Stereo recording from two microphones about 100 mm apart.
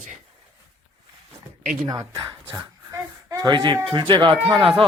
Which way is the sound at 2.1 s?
50° right (ahead or behind).